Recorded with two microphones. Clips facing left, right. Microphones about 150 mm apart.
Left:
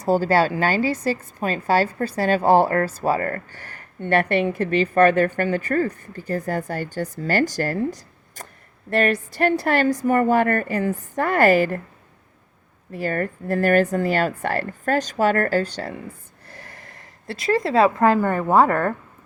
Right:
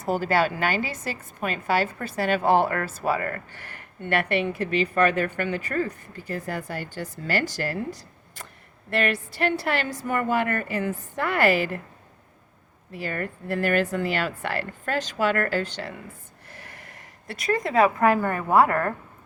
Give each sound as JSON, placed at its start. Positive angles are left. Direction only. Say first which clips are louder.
{"t": 0.0, "sound": "a woman's voice", "louder": "left 5 dB", "side_deg": 35}
{"t": 12.9, "sound": "a woman's voice", "louder": "left 6 dB", "side_deg": 45}
{"t": 16.5, "sound": "a sound", "louder": "left 2 dB", "side_deg": 40}